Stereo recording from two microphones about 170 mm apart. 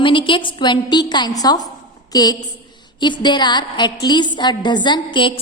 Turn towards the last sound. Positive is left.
turn(degrees=25)  # may be behind; listen again after turning